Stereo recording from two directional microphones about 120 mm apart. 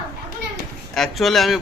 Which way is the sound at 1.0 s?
Centre (ahead or behind).